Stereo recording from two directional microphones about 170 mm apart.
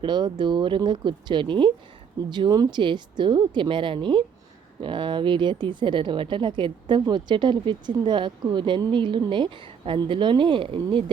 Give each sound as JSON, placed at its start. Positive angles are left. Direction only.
{"t": 0.0, "sound": "a woman's voice", "side_deg": -25}